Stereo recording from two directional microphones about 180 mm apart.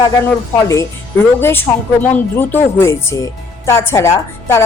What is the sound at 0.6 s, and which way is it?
A woman's voice, 15° left (ahead or behind).